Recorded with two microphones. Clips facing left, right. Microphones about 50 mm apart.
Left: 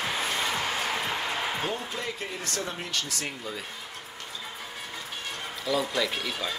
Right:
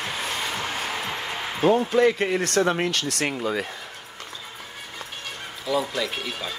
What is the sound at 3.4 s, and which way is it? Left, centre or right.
Speech, right.